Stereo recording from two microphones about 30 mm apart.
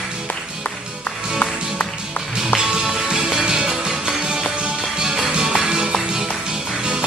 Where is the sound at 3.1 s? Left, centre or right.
Right.